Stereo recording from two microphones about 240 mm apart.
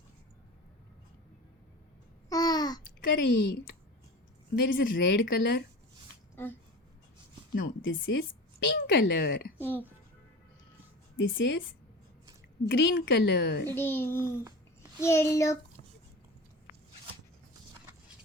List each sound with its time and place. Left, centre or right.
2.3 s babbling: centre
3.1 s a woman's voice: left
6.3 s speech: centre
7.5 s a woman's voice: left
9.6 s speech: centre
11.2 s a woman's voice: left
12.6 s a woman's voice: left
13.7 s a child's voice: centre